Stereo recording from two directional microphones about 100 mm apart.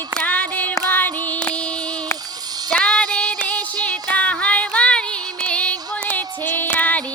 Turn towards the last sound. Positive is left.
turn(degrees=15)  # may be behind; listen again after turning